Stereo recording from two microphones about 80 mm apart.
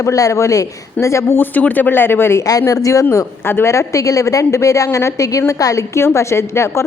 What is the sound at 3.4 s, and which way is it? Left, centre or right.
A woman's voice, left.